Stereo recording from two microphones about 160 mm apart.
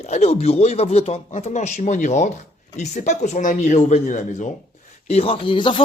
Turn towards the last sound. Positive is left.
turn(degrees=30)  # may be behind; listen again after turning